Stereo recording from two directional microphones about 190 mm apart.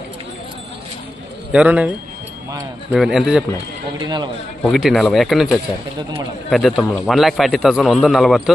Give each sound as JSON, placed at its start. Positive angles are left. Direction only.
{"t": 1.5, "sound": "a man's voice", "side_deg": -5}
{"t": 2.9, "sound": "a man's voice", "side_deg": 0}
{"t": 4.0, "sound": "a man's voice", "side_deg": -20}
{"t": 4.6, "sound": "a man's voice", "side_deg": 0}